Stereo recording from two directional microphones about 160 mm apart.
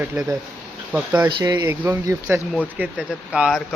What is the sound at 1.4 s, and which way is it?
Speech, 25° right (ahead or behind).